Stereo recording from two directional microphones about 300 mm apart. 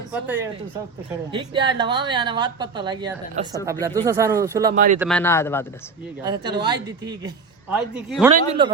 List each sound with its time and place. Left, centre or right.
1.3 s a woman's voice: centre
4.7 s speech: right
4.9 s speech: centre
6.2 s a woman's voice: centre
7.9 s speech: centre
8.4 s a woman's voice: centre